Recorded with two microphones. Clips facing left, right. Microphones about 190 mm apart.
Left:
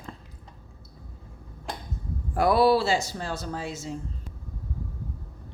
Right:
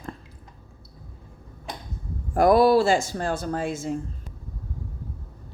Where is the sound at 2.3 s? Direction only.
45° right (ahead or behind).